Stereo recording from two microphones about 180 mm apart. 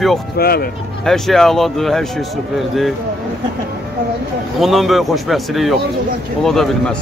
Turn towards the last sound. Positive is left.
turn(degrees=0)  # may be behind; listen again after turning